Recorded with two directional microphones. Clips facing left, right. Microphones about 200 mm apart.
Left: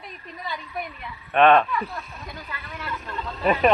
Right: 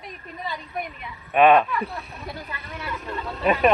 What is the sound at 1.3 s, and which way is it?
Speech, 5° right (ahead or behind).